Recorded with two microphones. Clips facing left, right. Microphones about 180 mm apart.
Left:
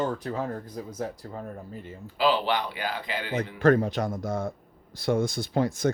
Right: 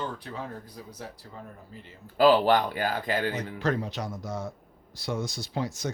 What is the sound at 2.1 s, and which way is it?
Speech, 45° right (ahead or behind).